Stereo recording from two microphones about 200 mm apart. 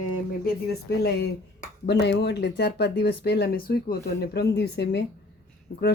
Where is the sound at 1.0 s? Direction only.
55° left (ahead or behind).